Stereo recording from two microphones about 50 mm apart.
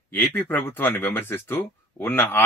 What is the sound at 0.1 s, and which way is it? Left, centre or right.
Speech, left.